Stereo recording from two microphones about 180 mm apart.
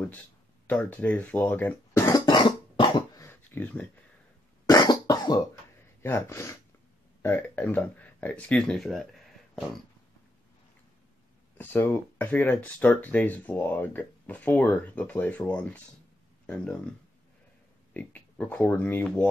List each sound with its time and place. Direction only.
0.7 s cough: 10° left (ahead or behind); by 3.3 s 25° left (ahead or behind)
3.3 s a sound: 10° left (ahead or behind)
4.6 s cough: 20° left (ahead or behind)
6.0 s speech: 15° left (ahead or behind)
11.5 s speech: 10° left (ahead or behind)
17.9 s speech: 10° left (ahead or behind)